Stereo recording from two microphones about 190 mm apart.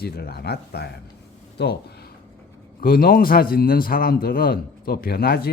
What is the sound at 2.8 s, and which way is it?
Speech, 50° left (ahead or behind).